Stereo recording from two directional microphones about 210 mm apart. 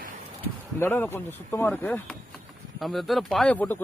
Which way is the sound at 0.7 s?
10° left (ahead or behind).